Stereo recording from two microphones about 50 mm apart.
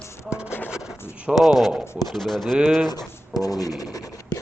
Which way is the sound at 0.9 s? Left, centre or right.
Left.